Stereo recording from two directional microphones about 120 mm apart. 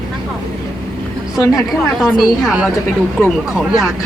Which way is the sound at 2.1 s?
5° right (ahead or behind).